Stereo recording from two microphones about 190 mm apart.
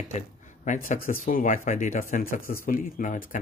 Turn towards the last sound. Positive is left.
turn(degrees=45)  # may be behind; listen again after turning